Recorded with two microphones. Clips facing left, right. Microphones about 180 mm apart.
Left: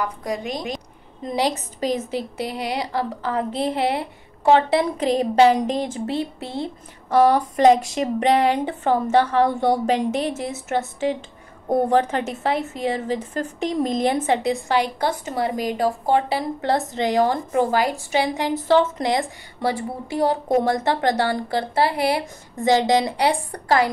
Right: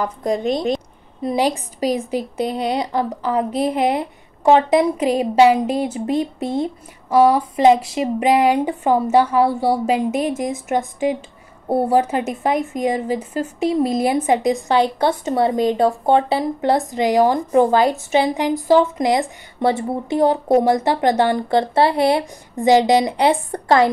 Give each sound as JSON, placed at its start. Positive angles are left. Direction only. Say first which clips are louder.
{"t": 0.0, "sound": "a woman's voice", "louder": "right 5 dB", "side_deg": -30}
{"t": 0.7, "sound": "a woman's voice", "louder": "right 6 dB", "side_deg": -10}
{"t": 7.2, "sound": "a woman's voice", "louder": "right 2 dB", "side_deg": -5}